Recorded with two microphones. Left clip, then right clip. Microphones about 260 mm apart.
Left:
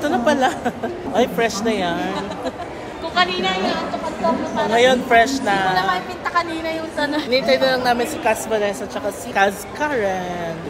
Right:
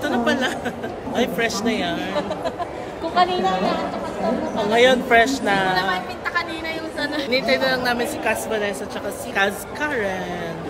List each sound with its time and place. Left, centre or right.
0.0 s speech: centre
3.2 s speech: right
4.6 s speech: centre
5.9 s a woman's voice: centre
7.0 s speech: centre
7.2 s a woman's voice: centre